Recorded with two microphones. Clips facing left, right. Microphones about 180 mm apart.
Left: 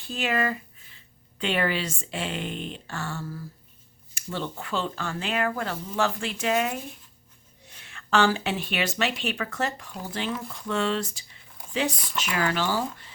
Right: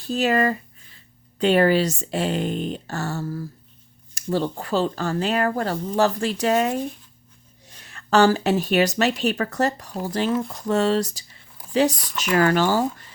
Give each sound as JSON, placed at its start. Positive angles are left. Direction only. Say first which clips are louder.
{"t": 0.0, "sound": "speech", "louder": "right 7 dB", "side_deg": -40}